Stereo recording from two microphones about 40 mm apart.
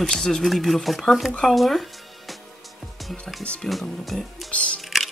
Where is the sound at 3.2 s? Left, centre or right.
Left.